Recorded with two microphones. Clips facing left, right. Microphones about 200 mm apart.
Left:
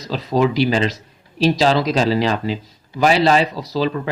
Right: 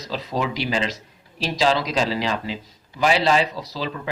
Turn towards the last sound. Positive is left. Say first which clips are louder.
# left 9 dB
turn(degrees=45)  # may be behind; listen again after turning